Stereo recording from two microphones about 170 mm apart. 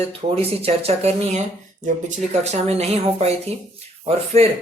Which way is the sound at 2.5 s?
40° right (ahead or behind).